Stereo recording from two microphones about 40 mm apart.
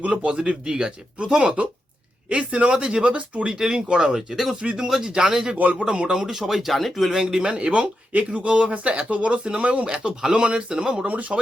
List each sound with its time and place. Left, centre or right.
0.0 s speech: right
0.3 s speech: right
3.6 s speech: right
6.4 s speech: centre
7.1 s speech: centre
7.5 s speech: right